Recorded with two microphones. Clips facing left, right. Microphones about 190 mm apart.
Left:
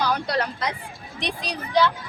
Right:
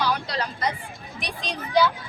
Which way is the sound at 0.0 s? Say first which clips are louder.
Left 2 dB; 50° left (ahead or behind).